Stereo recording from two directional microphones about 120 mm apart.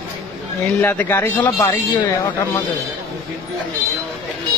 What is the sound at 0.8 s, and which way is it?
Speech, 15° left (ahead or behind).